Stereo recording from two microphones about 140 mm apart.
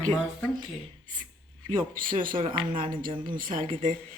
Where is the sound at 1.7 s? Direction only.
75° right (ahead or behind).